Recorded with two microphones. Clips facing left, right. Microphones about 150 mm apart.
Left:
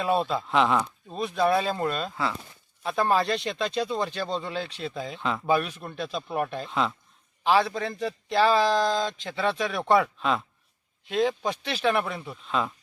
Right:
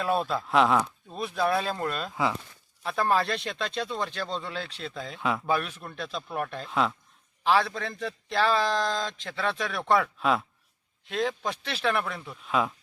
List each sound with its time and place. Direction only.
0.2 s a man's voice: centre (ahead or behind)
12.5 s a man's voice: 5° right (ahead or behind)